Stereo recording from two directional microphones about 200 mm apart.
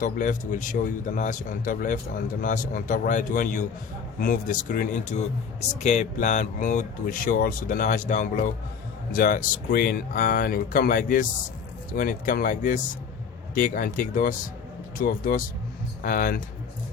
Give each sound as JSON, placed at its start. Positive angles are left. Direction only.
{"t": 0.0, "sound": "speech", "side_deg": 40}